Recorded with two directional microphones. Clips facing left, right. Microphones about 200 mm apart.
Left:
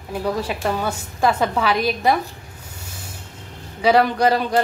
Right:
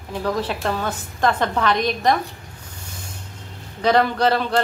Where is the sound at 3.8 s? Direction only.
10° left (ahead or behind).